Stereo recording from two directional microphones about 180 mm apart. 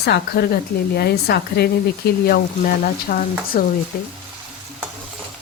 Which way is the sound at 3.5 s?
55° left (ahead or behind).